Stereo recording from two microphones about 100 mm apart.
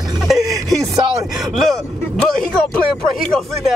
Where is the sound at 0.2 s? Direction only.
Centre (ahead or behind).